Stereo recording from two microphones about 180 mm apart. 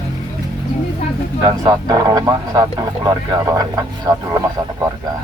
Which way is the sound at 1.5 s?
20° right (ahead or behind).